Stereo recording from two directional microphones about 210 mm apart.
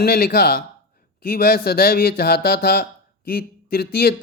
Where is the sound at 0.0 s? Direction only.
45° left (ahead or behind).